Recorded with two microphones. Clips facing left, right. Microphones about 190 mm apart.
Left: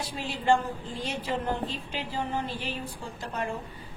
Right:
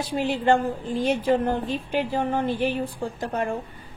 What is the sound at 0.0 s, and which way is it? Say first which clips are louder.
A woman's voice: right 8 dB; 60° right (ahead or behind).